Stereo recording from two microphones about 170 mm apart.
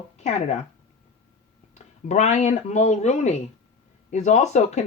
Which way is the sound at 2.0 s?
45° left (ahead or behind).